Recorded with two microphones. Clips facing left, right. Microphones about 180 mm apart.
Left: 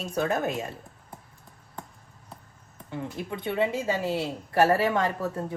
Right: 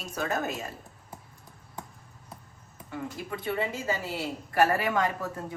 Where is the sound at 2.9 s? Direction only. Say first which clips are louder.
Left 2 dB; 25° left (ahead or behind).